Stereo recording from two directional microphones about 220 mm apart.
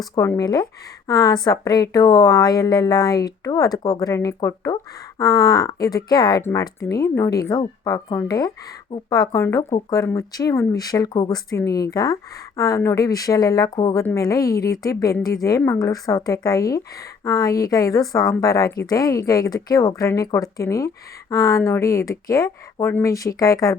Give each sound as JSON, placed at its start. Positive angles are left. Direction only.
{"t": 0.0, "sound": "a woman's voice", "side_deg": 15}